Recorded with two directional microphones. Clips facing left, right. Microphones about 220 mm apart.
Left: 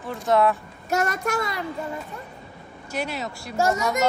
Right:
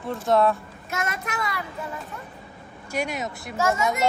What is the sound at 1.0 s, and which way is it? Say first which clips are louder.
Speech: left 5 dB; 40° left (ahead or behind).